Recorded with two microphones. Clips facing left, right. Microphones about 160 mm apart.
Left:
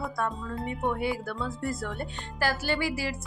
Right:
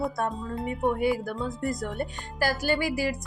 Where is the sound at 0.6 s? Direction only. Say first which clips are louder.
Right 4 dB; 45° right (ahead or behind).